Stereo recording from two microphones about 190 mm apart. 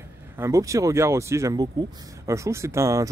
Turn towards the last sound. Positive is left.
turn(degrees=-15)  # may be behind; listen again after turning